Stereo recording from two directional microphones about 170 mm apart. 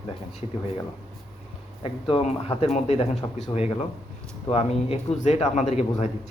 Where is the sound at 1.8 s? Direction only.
30° left (ahead or behind).